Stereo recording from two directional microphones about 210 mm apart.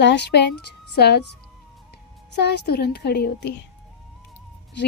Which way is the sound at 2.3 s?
50° left (ahead or behind).